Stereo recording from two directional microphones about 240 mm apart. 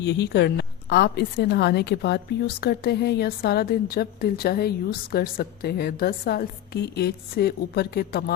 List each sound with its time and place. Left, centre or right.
0.0 s a woman's voice: left